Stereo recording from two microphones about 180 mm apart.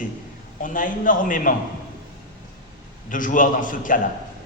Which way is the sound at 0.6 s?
45° left (ahead or behind).